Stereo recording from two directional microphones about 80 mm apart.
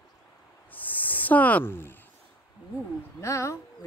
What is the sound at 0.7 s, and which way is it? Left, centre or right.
Owl, left.